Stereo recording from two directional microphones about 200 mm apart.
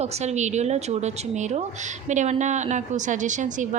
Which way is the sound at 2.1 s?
35° right (ahead or behind).